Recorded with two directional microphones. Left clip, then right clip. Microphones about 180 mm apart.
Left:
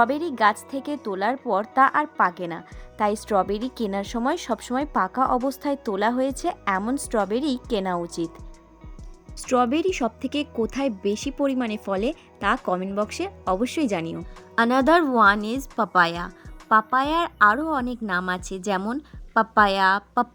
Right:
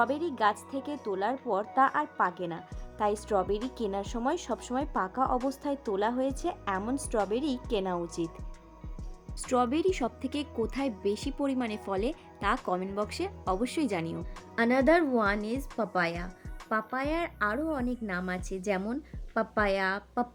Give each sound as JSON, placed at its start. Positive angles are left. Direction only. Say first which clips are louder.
{"t": 0.0, "sound": "speech", "louder": "left 7 dB", "side_deg": 50}
{"t": 9.5, "sound": "speech", "louder": "left 6 dB", "side_deg": 35}
{"t": 14.5, "sound": "speech", "louder": "left 6 dB", "side_deg": 45}